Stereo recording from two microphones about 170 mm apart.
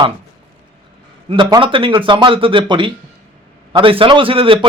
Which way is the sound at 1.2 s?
30° right (ahead or behind).